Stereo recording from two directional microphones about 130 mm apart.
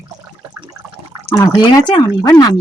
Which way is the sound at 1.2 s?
20° left (ahead or behind).